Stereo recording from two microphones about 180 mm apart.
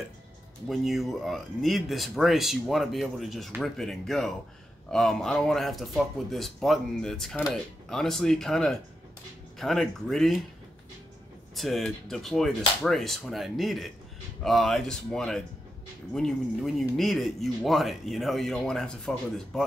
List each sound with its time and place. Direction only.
0.7 s speech: centre (ahead or behind)
11.5 s speech: centre (ahead or behind)